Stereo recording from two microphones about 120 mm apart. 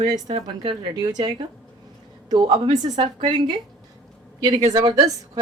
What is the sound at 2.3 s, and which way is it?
A woman's voice, 40° right (ahead or behind).